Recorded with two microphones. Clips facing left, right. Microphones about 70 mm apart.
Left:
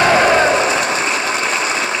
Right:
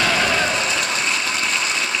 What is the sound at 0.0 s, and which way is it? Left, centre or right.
Ratchet, left.